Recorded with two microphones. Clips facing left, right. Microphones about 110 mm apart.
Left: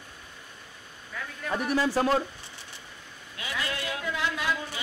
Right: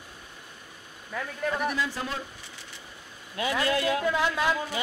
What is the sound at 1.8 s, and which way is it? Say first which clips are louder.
Speech: left 7 dB; 45° left (ahead or behind).